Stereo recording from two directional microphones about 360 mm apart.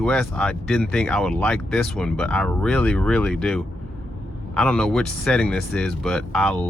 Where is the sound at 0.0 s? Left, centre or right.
Centre.